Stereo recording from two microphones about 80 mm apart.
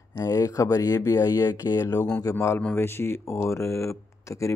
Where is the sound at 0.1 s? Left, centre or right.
Left.